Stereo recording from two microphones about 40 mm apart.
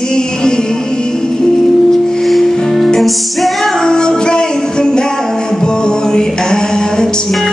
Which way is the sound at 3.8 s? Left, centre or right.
Centre.